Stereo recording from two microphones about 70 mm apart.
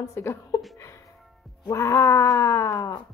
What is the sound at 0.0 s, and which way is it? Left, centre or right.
Speech, left.